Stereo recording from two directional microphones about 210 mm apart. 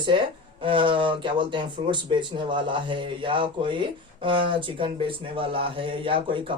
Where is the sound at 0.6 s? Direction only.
25° right (ahead or behind).